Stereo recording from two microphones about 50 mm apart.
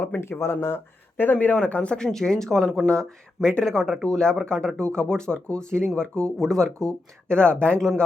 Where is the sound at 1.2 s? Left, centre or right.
Left.